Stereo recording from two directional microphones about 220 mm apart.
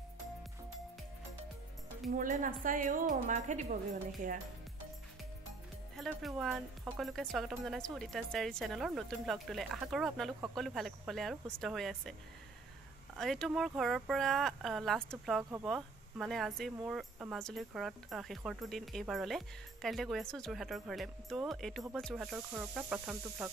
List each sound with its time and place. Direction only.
2.1 s a woman's voice: 35° right (ahead or behind)
5.9 s speech: centre (ahead or behind)
13.2 s speech: centre (ahead or behind)